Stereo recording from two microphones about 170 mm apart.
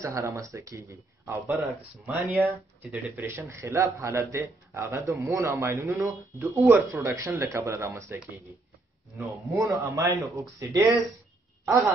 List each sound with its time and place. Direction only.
0.0 s speech: 15° right (ahead or behind)
9.1 s speech: 20° right (ahead or behind)